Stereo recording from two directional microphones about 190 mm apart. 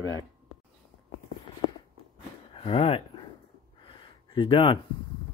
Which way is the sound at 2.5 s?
30° left (ahead or behind).